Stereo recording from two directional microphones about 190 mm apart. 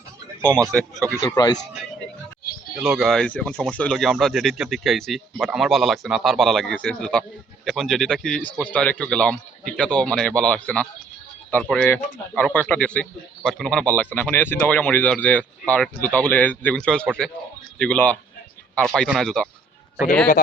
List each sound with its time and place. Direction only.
0.5 s speech: 5° left (ahead or behind)
1.2 s speech: 20° left (ahead or behind)
2.8 s a man's voice: centre (ahead or behind)